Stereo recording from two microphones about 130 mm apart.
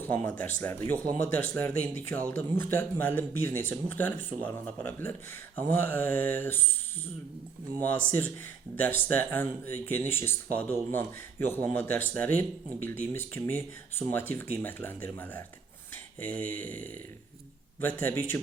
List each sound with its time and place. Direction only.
0.0 s speech: 15° left (ahead or behind)
7.8 s speech: 15° left (ahead or behind)